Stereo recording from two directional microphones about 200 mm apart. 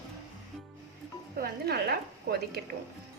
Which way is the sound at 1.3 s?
50° right (ahead or behind).